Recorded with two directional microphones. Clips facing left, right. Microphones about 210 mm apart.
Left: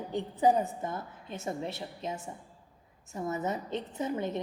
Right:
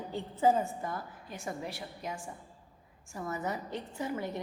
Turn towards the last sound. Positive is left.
turn(degrees=20)  # may be behind; listen again after turning